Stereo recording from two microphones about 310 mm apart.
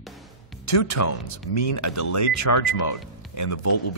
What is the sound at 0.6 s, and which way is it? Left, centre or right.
Speech, left.